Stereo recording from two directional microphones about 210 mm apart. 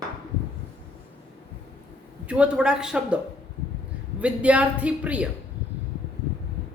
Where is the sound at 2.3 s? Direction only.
5° right (ahead or behind).